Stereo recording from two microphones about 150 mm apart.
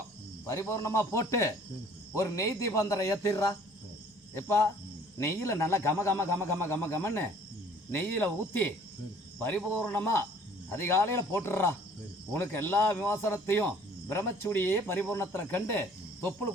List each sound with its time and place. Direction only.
0.4 s speech: 20° left (ahead or behind)